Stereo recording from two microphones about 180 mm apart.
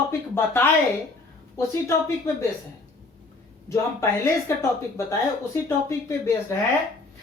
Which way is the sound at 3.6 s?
15° left (ahead or behind).